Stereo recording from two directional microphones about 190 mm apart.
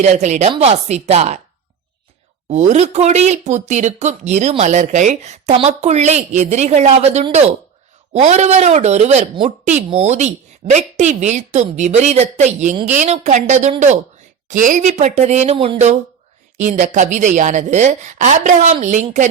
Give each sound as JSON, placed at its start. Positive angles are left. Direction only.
{"t": 0.0, "sound": "speech", "side_deg": -35}
{"t": 2.5, "sound": "speech", "side_deg": -40}